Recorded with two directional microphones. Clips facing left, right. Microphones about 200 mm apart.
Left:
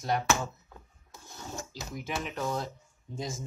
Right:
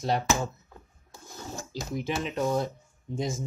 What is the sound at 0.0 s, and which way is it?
Speech, 30° right (ahead or behind).